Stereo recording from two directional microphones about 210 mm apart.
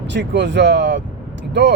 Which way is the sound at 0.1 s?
55° right (ahead or behind).